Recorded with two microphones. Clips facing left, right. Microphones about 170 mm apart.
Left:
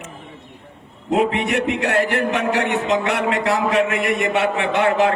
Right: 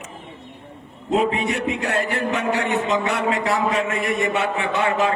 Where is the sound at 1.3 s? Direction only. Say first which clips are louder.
Left 3 dB; 70° left (ahead or behind).